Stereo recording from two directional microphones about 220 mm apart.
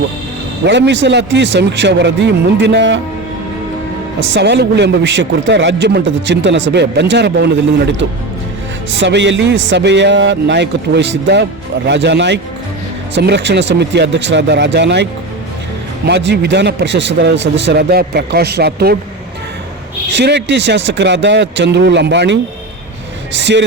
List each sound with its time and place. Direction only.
0.6 s a man's voice: 50° right (ahead or behind)
4.2 s a man's voice: 50° right (ahead or behind)
8.9 s a man's voice: 55° right (ahead or behind)
16.0 s a man's voice: 50° right (ahead or behind)
20.1 s a man's voice: 50° right (ahead or behind)